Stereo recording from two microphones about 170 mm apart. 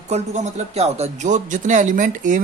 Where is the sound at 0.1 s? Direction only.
40° right (ahead or behind).